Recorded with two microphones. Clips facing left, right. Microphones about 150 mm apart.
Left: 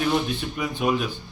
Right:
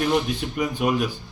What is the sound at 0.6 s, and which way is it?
Speech, 10° right (ahead or behind).